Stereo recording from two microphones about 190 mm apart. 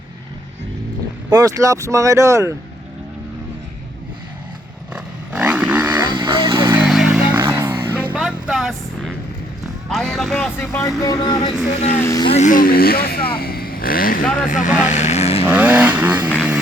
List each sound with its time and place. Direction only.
1.3 s speech: 20° right (ahead or behind)
4.9 s wild animals: 5° right (ahead or behind)
6.1 s vehicle: 25° right (ahead or behind)
6.6 s a sound: 15° right (ahead or behind)
6.8 s music: centre (ahead or behind)
8.1 s vehicle: 5° right (ahead or behind)
9.9 s speech: centre (ahead or behind); by 11.5 s 20° left (ahead or behind)
11.7 s speech: 35° left (ahead or behind)
11.9 s speech: 15° left (ahead or behind)
12.2 s speech: 35° left (ahead or behind)
14.8 s vehicle: 35° left (ahead or behind)
15.4 s speech: 5° right (ahead or behind)